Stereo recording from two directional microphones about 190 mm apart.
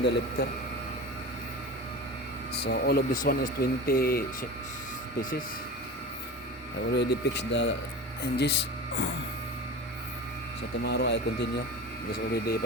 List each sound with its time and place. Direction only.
0.0 s speech: 65° left (ahead or behind)
2.6 s speech: 55° left (ahead or behind)
6.9 s speech: 60° left (ahead or behind)
10.8 s speech: 60° left (ahead or behind)